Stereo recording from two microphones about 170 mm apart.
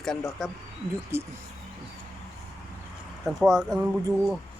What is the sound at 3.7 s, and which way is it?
Speech, 25° right (ahead or behind).